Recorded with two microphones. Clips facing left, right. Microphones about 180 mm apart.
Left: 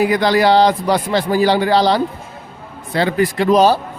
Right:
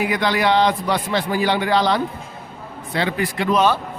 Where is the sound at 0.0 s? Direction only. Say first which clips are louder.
Left 6 dB; 35° left (ahead or behind).